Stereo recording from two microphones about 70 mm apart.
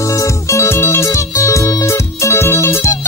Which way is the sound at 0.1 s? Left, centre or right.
Left.